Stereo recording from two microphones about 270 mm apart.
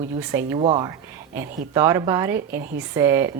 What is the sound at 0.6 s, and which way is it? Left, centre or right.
Speech, centre.